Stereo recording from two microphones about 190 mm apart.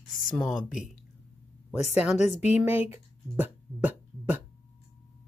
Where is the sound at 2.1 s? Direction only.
40° left (ahead or behind).